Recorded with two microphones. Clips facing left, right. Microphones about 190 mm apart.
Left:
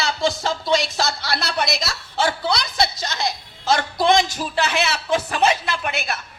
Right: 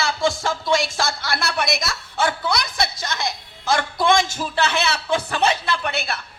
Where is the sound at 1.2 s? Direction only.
50° right (ahead or behind).